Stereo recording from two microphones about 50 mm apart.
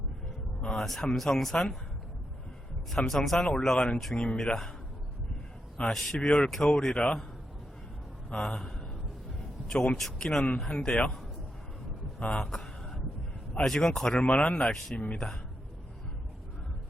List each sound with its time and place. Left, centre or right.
0.6 s a sound: centre
0.9 s speech: centre
3.1 s speech: centre
5.8 s speech: centre
6.1 s speech: centre
8.3 s speech: centre
12.4 s a sound: centre
13.7 s speech: centre
14.2 s speech: left